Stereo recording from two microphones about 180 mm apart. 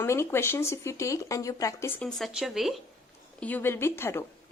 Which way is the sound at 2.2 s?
Centre (ahead or behind).